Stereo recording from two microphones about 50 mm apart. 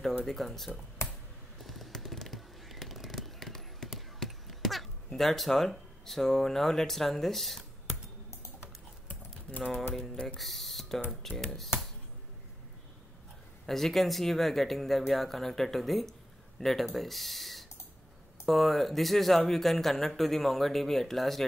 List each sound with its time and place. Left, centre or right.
0.2 s speech: centre
1.6 s a sound: centre
4.2 s speech: centre
9.1 s typing: left
10.2 s speech: centre
13.7 s speech: centre